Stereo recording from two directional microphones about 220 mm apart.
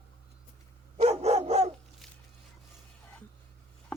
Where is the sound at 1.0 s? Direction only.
30° right (ahead or behind).